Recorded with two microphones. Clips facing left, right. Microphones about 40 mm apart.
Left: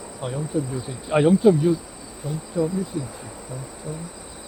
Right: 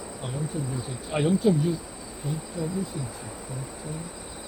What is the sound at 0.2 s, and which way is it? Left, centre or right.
Speech, centre.